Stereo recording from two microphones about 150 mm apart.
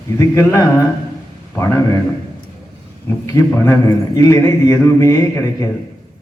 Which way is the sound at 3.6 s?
20° left (ahead or behind).